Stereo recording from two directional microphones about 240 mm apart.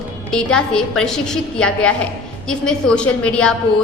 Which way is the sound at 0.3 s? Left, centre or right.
Centre.